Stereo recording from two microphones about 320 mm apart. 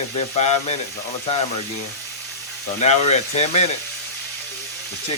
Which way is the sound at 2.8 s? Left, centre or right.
Left.